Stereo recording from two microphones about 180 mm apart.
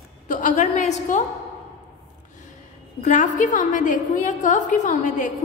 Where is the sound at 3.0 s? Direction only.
45° left (ahead or behind).